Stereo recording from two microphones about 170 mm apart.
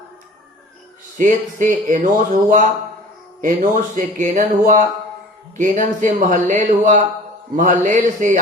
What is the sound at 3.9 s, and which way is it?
Speech, 50° right (ahead or behind).